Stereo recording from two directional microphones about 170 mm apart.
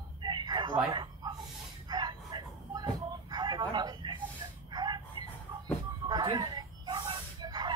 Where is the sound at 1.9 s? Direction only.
25° right (ahead or behind).